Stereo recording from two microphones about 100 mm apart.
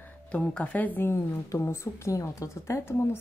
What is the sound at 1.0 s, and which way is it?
A woman's voice, 25° left (ahead or behind).